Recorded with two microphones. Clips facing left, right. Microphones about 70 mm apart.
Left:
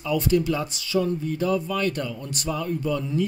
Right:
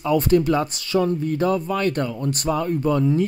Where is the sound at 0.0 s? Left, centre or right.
Right.